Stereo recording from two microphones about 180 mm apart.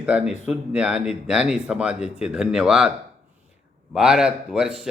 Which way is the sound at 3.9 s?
5° right (ahead or behind).